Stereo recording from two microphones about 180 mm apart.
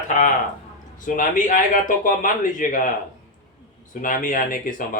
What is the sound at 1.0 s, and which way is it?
A man's voice, 45° left (ahead or behind).